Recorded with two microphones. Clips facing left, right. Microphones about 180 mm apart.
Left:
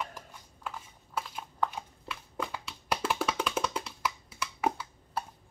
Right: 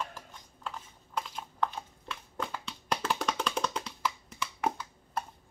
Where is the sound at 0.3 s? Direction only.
5° left (ahead or behind).